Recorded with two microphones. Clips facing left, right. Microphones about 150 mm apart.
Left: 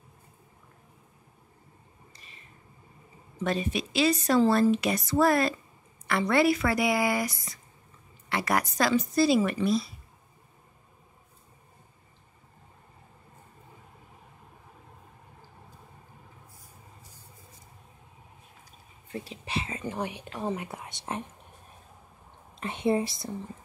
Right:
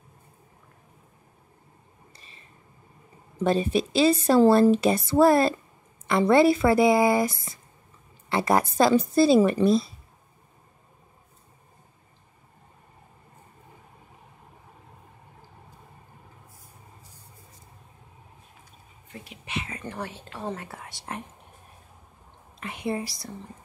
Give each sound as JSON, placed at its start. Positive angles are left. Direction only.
{"t": 2.1, "sound": "a sound", "side_deg": -30}
{"t": 3.4, "sound": "speech", "side_deg": -30}
{"t": 19.1, "sound": "whispering", "side_deg": 35}
{"t": 19.8, "sound": "whispering", "side_deg": 15}
{"t": 20.3, "sound": "speech", "side_deg": 15}
{"t": 22.6, "sound": "a woman's voice", "side_deg": 25}